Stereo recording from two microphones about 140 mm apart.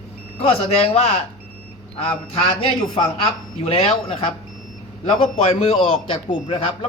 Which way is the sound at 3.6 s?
45° left (ahead or behind).